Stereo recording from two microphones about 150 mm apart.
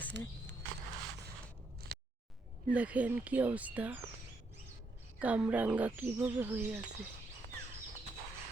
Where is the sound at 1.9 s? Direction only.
90° right.